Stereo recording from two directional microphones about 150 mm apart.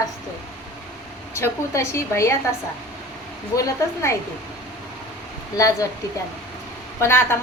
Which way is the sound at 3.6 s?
20° left (ahead or behind).